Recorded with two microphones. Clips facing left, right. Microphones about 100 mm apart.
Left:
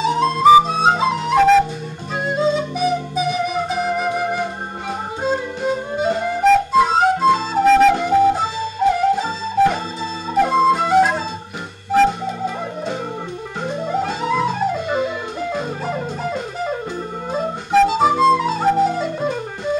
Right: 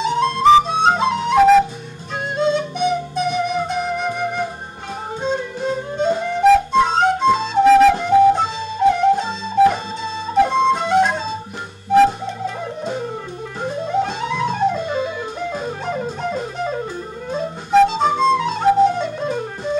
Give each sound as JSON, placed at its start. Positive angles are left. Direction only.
{"t": 0.0, "sound": "flute", "side_deg": 5}
{"t": 5.2, "sound": "music", "side_deg": 5}
{"t": 8.0, "sound": "flute", "side_deg": 5}
{"t": 13.8, "sound": "music", "side_deg": 5}
{"t": 17.3, "sound": "flute", "side_deg": 5}